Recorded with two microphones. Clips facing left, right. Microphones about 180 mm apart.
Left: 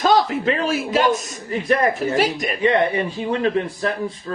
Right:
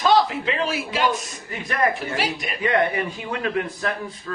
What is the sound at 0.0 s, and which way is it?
A man's voice, 45° left (ahead or behind).